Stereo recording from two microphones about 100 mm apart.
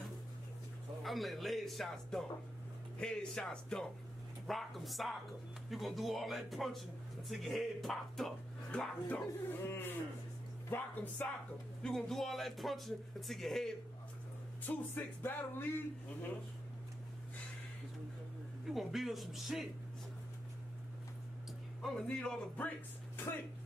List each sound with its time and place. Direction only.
1.0 s speech: centre (ahead or behind)
9.0 s speech: 20° left (ahead or behind)
11.8 s speech: 5° left (ahead or behind)
14.6 s speech: 20° left (ahead or behind)
18.7 s speech: centre (ahead or behind)
22.0 s speech: 10° left (ahead or behind)